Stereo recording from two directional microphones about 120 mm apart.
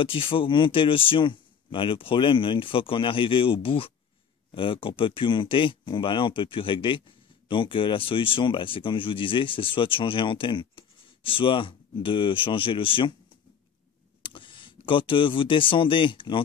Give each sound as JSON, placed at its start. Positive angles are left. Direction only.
{"t": 0.0, "sound": "speech", "side_deg": 45}
{"t": 14.2, "sound": "speech", "side_deg": 45}